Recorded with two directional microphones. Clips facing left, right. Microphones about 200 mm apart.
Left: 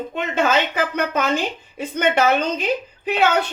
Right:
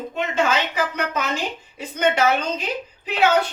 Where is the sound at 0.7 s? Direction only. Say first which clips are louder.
Left 3 dB; 55° left (ahead or behind).